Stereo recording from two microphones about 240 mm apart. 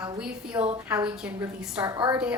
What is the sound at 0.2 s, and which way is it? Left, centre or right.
A woman's voice, centre.